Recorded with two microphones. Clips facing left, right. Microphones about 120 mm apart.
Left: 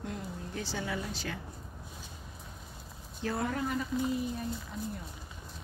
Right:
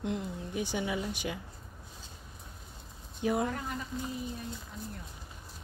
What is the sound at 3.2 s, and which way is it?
Speech, 15° right (ahead or behind).